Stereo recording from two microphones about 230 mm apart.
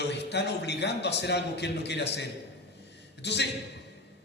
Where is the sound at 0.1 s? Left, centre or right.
Left.